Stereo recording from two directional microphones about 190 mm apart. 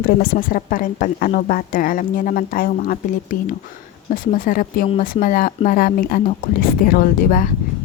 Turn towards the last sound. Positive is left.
turn(degrees=45)  # may be behind; listen again after turning